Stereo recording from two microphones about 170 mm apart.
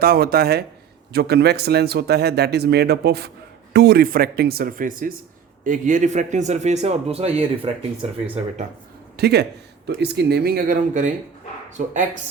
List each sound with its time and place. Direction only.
0.0 s a man's voice: 65° right (ahead or behind); by 7.9 s 35° right (ahead or behind)
9.1 s a man's voice: 75° right (ahead or behind); by 11.9 s 45° right (ahead or behind)